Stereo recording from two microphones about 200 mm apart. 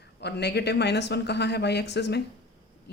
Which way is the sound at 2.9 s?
55° left (ahead or behind).